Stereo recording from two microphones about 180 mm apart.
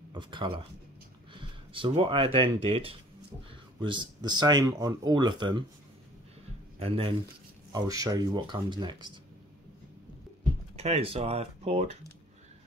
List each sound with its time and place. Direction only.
0.1 s speech: 25° right (ahead or behind)
6.8 s speech: 30° right (ahead or behind)
7.7 s speech: 20° right (ahead or behind)
10.8 s speech: 35° right (ahead or behind)